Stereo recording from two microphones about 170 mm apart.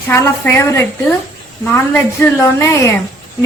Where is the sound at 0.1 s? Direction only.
15° left (ahead or behind).